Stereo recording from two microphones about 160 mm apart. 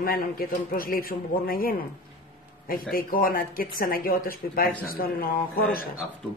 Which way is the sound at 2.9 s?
60° left (ahead or behind).